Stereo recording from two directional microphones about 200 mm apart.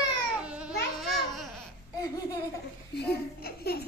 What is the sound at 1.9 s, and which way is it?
Laughter, 15° left (ahead or behind).